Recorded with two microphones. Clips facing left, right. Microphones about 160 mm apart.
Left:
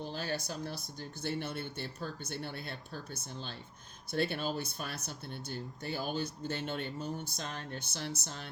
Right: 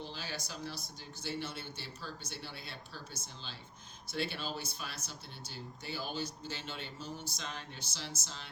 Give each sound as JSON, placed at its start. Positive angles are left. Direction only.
{"t": 0.0, "sound": "speech", "side_deg": 50}
{"t": 4.1, "sound": "speech", "side_deg": 55}